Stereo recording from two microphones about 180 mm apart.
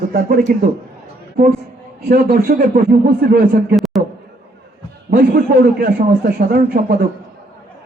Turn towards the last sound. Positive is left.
turn(degrees=-60)  # may be behind; listen again after turning